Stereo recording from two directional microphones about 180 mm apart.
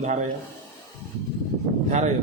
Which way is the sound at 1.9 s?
40° right (ahead or behind).